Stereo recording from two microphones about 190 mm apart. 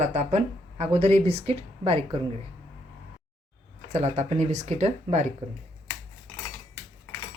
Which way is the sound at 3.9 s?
35° right (ahead or behind).